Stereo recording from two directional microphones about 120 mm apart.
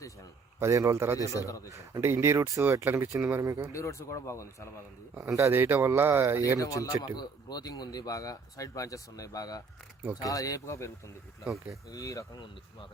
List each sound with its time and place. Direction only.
0.6 s speech: 25° right (ahead or behind)
3.7 s speech: 25° left (ahead or behind)
5.1 s speech: 25° right (ahead or behind)
6.6 s speech: 30° left (ahead or behind)